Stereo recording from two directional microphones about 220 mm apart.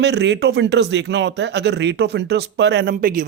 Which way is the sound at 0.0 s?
50° right (ahead or behind).